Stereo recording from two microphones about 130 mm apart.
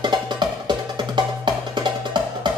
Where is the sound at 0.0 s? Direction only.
35° right (ahead or behind).